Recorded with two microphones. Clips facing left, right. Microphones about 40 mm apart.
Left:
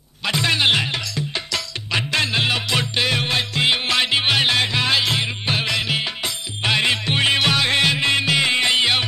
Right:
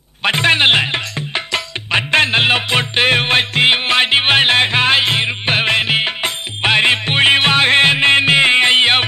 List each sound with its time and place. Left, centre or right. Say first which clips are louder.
0.2 s music: right 6 dB; right